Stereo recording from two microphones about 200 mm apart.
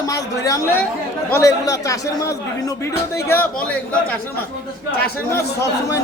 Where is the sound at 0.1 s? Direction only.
15° left (ahead or behind).